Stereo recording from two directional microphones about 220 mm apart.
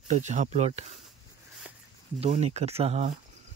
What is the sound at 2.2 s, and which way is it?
Speech, 30° right (ahead or behind).